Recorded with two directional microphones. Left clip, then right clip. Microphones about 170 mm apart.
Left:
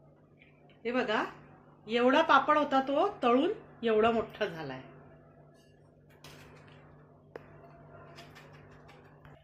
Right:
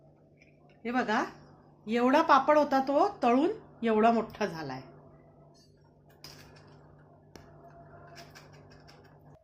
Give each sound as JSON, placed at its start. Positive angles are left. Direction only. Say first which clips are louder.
{"t": 0.8, "sound": "speech", "louder": "right 1 dB", "side_deg": -65}